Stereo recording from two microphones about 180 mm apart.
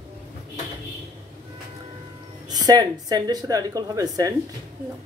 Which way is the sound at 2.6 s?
20° right (ahead or behind).